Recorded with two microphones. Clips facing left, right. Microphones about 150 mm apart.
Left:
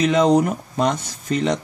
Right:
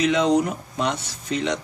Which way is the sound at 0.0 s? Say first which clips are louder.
Left 3 dB; 45° left (ahead or behind).